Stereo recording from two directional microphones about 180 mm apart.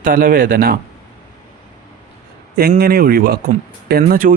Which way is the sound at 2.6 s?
60° right (ahead or behind).